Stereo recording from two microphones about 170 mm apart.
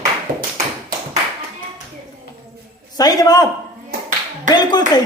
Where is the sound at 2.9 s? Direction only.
20° left (ahead or behind).